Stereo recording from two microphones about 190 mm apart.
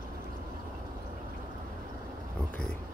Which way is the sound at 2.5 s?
5° left (ahead or behind).